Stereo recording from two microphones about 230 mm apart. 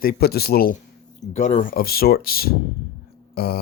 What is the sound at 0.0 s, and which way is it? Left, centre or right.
Speech, left.